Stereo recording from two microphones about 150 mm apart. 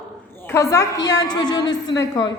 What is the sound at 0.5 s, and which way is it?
A woman's voice, 20° left (ahead or behind).